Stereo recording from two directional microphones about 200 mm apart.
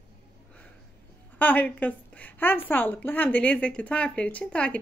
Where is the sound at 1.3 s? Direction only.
10° left (ahead or behind).